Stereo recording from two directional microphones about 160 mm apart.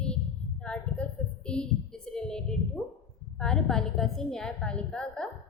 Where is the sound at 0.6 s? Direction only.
5° left (ahead or behind).